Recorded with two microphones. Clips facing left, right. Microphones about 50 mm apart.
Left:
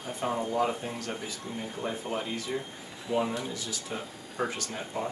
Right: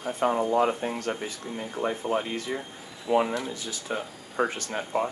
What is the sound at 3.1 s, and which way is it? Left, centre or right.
Speech, right.